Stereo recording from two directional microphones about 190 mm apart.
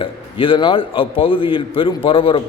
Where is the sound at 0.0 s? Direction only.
25° left (ahead or behind).